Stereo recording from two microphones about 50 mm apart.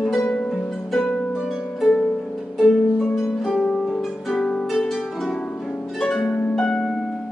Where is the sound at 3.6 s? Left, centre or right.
Centre.